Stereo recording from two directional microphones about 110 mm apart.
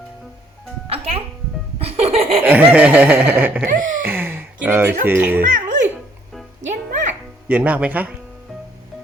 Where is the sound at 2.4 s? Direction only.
15° right (ahead or behind).